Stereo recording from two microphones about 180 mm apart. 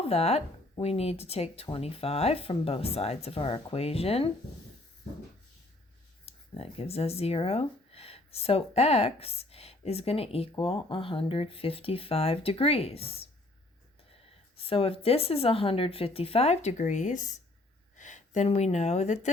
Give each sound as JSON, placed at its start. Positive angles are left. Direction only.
{"t": 0.0, "sound": "a woman's voice", "side_deg": 35}
{"t": 6.2, "sound": "a woman's voice", "side_deg": 35}
{"t": 14.6, "sound": "a woman's voice", "side_deg": 30}